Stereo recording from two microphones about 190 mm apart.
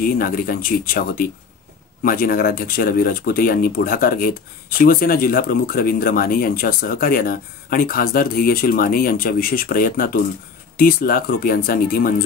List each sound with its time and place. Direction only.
0.2 s speech: 50° left (ahead or behind)